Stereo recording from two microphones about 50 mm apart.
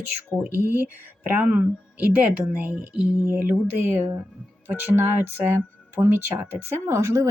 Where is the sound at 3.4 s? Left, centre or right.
Right.